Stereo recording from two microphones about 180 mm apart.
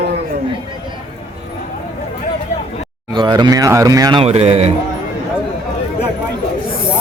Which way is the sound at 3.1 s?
25° right (ahead or behind).